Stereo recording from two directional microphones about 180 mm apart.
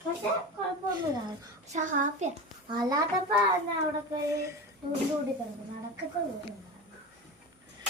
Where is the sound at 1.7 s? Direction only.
45° right (ahead or behind).